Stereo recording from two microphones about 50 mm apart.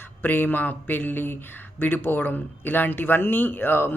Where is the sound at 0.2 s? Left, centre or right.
Left.